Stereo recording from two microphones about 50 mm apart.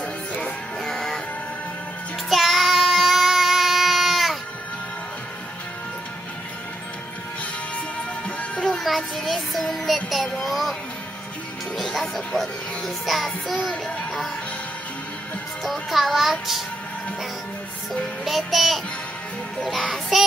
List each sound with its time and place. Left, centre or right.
0.8 s music: centre
2.2 s child singing: centre
8.4 s music: centre
8.8 s child singing: centre
11.7 s music: centre
15.6 s music: centre
18.2 s music: centre
19.9 s music: centre